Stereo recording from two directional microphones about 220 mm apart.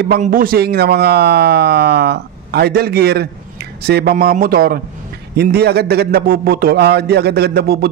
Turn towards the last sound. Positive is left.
turn(degrees=-45)  # may be behind; listen again after turning